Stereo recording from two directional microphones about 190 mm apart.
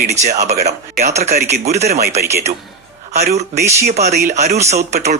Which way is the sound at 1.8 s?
55° right (ahead or behind).